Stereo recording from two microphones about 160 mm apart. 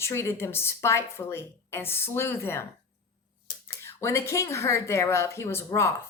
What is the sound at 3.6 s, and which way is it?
Speech, 15° left (ahead or behind).